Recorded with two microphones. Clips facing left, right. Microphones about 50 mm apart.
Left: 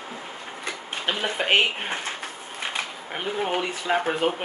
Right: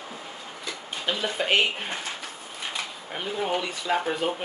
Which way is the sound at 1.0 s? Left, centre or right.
Left.